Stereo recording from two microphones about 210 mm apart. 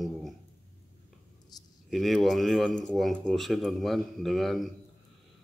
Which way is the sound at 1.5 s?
20° left (ahead or behind).